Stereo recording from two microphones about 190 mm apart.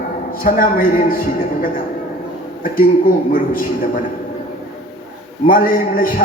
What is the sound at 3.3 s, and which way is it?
Speech, 50° left (ahead or behind).